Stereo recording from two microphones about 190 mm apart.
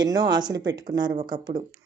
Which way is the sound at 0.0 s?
20° right (ahead or behind).